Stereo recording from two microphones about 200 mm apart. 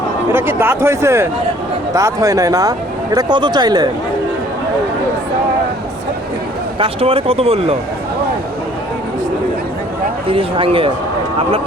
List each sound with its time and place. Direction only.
0.3 s speech: 10° right (ahead or behind)
6.7 s speech: 30° right (ahead or behind)
10.2 s speech: 25° right (ahead or behind)